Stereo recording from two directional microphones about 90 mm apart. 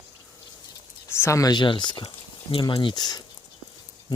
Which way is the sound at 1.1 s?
30° left (ahead or behind).